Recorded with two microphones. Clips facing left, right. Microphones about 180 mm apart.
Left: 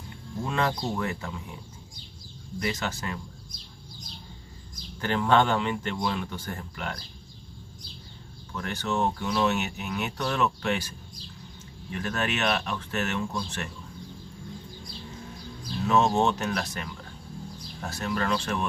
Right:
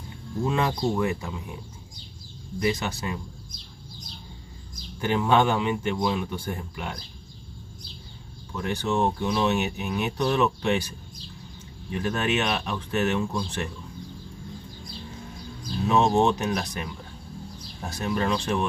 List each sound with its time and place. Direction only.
0.5 s speech: 15° right (ahead or behind)
2.6 s speech: 20° right (ahead or behind)
5.0 s speech: 10° right (ahead or behind)
8.5 s speech: 15° right (ahead or behind)
11.9 s speech: 15° right (ahead or behind)
15.9 s speech: 15° right (ahead or behind)